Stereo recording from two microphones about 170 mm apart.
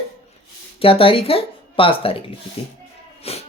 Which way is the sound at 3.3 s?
35° left (ahead or behind).